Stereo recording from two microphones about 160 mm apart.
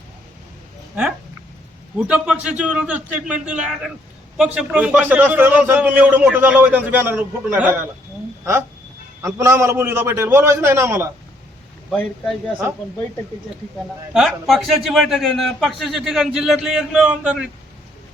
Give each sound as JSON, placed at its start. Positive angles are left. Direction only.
{"t": 2.0, "sound": "a man's voice", "side_deg": -5}
{"t": 9.2, "sound": "a man's voice", "side_deg": -15}
{"t": 11.9, "sound": "a man's voice", "side_deg": 5}
{"t": 14.1, "sound": "a man's voice", "side_deg": -5}